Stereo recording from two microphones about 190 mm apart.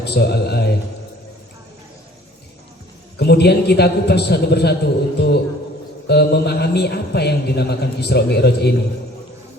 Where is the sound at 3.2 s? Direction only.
60° left (ahead or behind).